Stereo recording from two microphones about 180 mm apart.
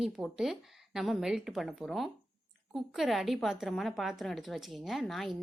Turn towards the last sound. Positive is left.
turn(degrees=0)  # may be behind; listen again after turning